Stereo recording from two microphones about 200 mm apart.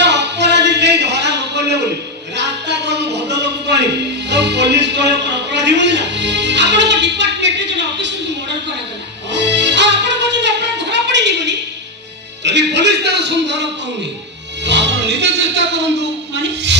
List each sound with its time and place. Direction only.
0.0 s a sound: 60° right (ahead or behind)
9.3 s music: 60° right (ahead or behind)
12.4 s a man's voice: 60° right (ahead or behind)
14.6 s music: 60° right (ahead or behind)